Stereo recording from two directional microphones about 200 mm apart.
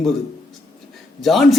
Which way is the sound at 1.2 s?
Centre (ahead or behind).